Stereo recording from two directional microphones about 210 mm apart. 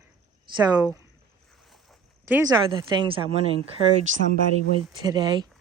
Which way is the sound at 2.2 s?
15° right (ahead or behind).